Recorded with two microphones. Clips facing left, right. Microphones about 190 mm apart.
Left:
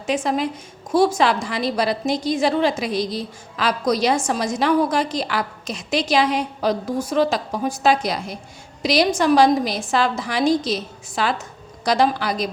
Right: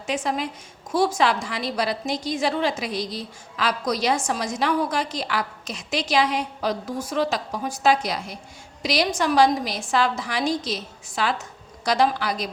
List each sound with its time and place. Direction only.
0.1 s a woman's voice: 35° left (ahead or behind)